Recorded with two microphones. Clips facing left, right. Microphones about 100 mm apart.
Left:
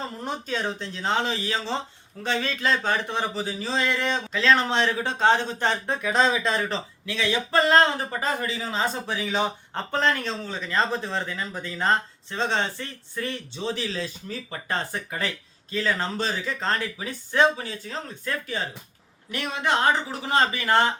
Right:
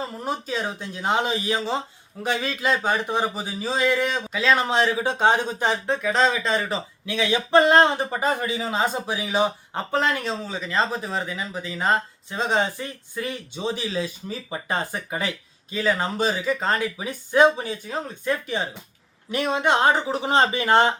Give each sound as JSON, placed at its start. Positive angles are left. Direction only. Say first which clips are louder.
{"t": 0.2, "sound": "speech", "louder": "right 2 dB", "side_deg": -5}
{"t": 7.0, "sound": "speech", "louder": "right 3 dB", "side_deg": -15}